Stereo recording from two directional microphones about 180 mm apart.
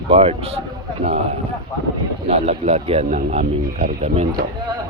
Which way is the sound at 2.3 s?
35° right (ahead or behind).